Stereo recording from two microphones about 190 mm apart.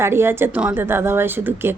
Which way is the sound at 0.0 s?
10° right (ahead or behind).